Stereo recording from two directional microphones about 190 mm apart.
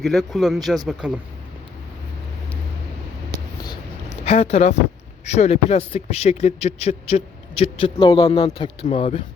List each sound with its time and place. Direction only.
0.0 s speech: centre (ahead or behind)
4.1 s speech: 35° left (ahead or behind)